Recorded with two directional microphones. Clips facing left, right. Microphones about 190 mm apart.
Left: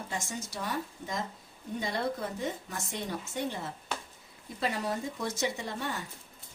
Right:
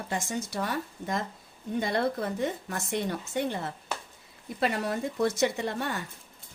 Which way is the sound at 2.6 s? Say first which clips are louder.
Right 6 dB; 60° right (ahead or behind).